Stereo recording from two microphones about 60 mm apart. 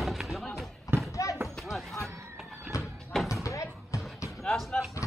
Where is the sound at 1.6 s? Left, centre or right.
Centre.